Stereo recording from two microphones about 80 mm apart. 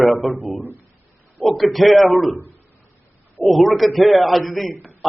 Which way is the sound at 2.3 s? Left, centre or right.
Right.